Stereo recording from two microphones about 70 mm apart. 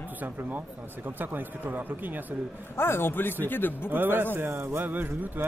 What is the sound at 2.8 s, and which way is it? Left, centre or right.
A man's voice, left.